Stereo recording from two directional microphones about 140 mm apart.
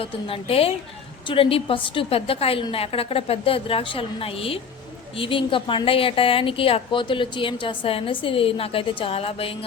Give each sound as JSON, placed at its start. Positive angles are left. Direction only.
{"t": 0.0, "sound": "a woman's voice", "side_deg": 40}